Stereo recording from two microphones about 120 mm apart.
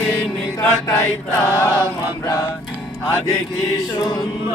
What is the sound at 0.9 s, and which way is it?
Mantra, 20° left (ahead or behind).